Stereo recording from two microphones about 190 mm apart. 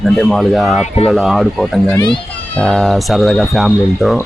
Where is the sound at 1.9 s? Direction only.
25° left (ahead or behind).